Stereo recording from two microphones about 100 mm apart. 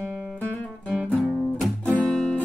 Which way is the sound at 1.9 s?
10° left (ahead or behind).